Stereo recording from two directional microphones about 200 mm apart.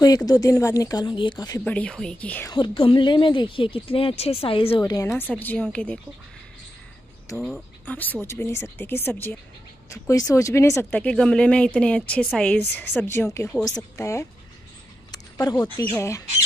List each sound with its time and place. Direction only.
0.0 s a woman's voice: 20° left (ahead or behind)
1.6 s speech: 5° left (ahead or behind)
2.5 s a woman's voice: 25° left (ahead or behind); by 5.9 s 5° left (ahead or behind)
7.3 s speech: centre (ahead or behind)
15.0 s a sound: 20° left (ahead or behind)
15.9 s speech: 15° left (ahead or behind)